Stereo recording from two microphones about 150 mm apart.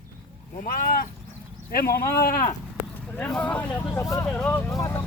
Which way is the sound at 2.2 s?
70° left (ahead or behind).